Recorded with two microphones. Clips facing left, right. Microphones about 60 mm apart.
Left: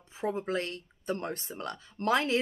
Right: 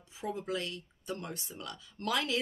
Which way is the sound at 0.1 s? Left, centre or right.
Left.